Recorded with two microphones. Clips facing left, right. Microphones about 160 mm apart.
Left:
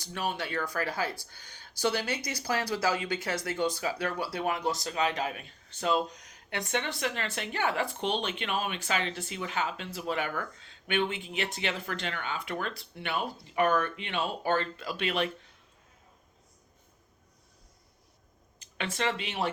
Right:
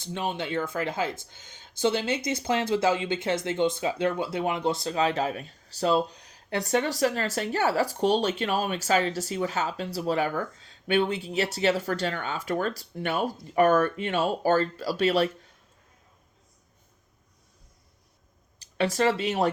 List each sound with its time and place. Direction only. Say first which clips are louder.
0.0 s speech: right 3 dB; 25° right (ahead or behind)
18.6 s speech: right 8 dB; 40° right (ahead or behind)